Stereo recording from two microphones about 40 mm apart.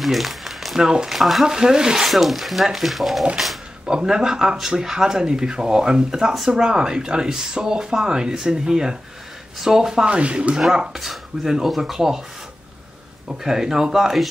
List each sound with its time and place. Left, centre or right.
0.0 s a sound: centre
0.7 s speech: centre
1.1 s speech: centre
1.4 s speech: centre
2.0 s speech: centre
3.8 s speech: centre
10.0 s speech: right
10.7 s speech: centre
13.3 s speech: centre